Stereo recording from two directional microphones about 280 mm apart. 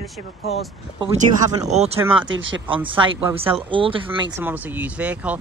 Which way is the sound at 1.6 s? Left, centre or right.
Right.